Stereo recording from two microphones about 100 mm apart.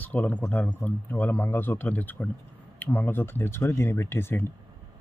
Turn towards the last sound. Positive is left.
turn(degrees=20)  # may be behind; listen again after turning